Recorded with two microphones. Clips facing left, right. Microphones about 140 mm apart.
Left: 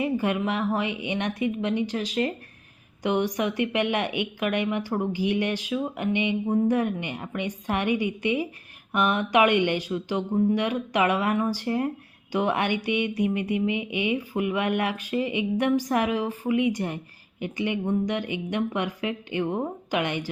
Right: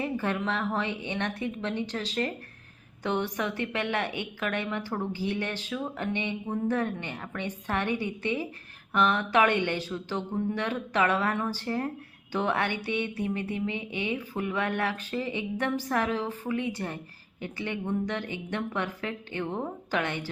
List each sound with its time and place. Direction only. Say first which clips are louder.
0.0 s speech: left 5 dB; 15° left (ahead or behind)